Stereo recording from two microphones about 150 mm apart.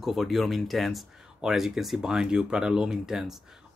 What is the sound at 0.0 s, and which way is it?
Speech, centre (ahead or behind).